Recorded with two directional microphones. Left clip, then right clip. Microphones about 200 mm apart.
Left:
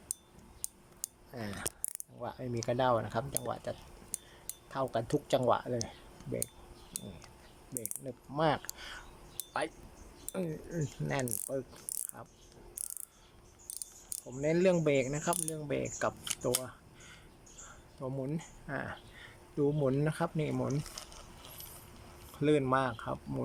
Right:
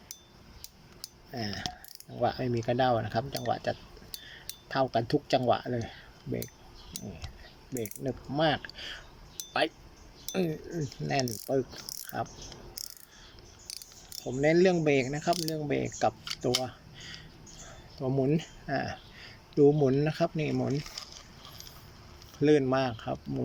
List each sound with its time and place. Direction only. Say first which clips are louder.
1.3 s speech: right 6 dB; centre (ahead or behind)
4.2 s a sound: right 7 dB; centre (ahead or behind)
5.3 s speech: right 2 dB; centre (ahead or behind)
7.8 s speech: right 9 dB; centre (ahead or behind)
11.9 s a sound: right 4 dB; 40° left (ahead or behind)
14.4 s speech: right 4 dB; centre (ahead or behind)
22.4 s speech: right 4 dB; centre (ahead or behind)